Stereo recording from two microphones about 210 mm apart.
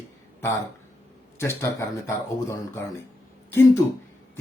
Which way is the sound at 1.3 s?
10° left (ahead or behind).